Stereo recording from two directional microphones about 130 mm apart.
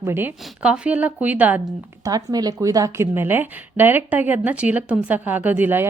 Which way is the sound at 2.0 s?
30° right (ahead or behind).